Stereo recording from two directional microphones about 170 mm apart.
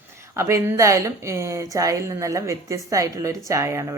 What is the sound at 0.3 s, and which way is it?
Speech, 15° right (ahead or behind).